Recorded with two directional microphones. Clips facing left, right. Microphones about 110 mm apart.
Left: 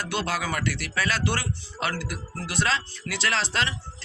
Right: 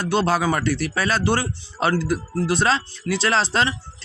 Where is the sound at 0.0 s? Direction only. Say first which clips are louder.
Right 8 dB; 30° right (ahead or behind).